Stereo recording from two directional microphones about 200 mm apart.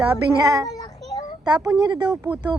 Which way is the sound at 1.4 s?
20° right (ahead or behind).